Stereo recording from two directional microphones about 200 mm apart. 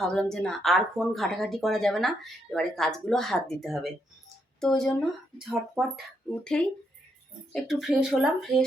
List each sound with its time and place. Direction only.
0.0 s speech: 5° left (ahead or behind)